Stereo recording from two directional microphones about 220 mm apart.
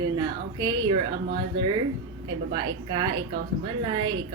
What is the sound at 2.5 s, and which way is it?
Speech, 20° right (ahead or behind).